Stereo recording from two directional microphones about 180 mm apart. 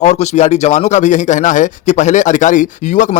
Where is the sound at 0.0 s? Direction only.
40° left (ahead or behind).